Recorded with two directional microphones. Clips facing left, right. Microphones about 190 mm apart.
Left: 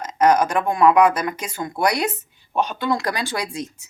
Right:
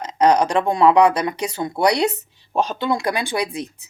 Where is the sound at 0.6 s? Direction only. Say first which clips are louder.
Right 1 dB; 30° right (ahead or behind).